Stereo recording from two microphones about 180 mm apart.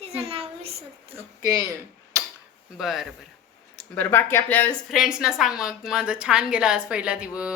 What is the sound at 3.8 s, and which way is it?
Speech, 10° left (ahead or behind).